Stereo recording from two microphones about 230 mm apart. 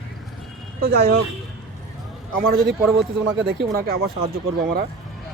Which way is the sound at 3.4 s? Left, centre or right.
Right.